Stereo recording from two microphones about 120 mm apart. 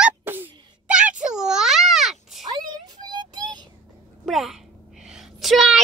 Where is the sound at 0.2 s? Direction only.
15° right (ahead or behind); by 2.4 s centre (ahead or behind).